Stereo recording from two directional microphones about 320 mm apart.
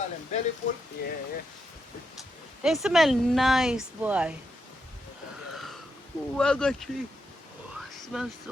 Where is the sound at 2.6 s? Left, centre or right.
Centre.